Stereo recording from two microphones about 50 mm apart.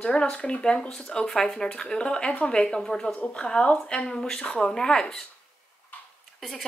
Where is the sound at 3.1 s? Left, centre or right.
Left.